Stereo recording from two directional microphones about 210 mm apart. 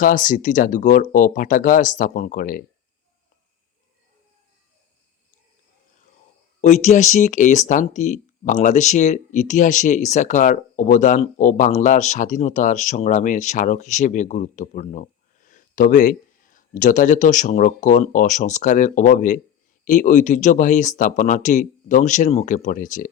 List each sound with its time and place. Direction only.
0.0 s speech: 40° left (ahead or behind)
6.8 s speech: 35° left (ahead or behind)